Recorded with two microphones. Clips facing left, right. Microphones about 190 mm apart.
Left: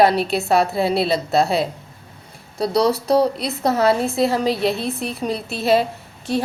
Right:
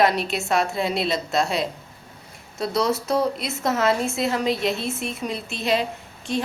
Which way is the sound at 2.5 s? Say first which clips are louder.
Left 5 dB; 35° left (ahead or behind).